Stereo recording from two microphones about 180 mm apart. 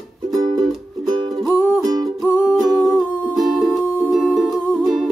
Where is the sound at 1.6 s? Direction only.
5° left (ahead or behind).